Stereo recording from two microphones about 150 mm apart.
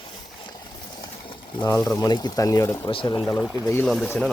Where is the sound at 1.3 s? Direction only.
30° left (ahead or behind).